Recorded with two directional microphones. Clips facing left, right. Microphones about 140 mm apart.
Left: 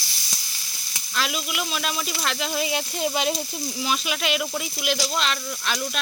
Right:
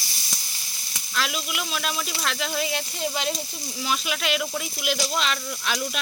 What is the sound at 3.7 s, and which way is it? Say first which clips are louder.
Speech: even; 5° left (ahead or behind).